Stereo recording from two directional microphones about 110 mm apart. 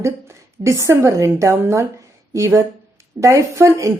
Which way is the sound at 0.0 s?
25° right (ahead or behind).